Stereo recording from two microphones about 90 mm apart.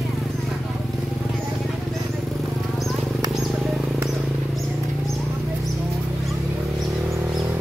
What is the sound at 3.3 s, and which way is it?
Wild animals, centre (ahead or behind).